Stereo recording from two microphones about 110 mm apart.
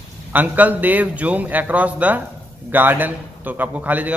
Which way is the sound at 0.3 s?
15° right (ahead or behind).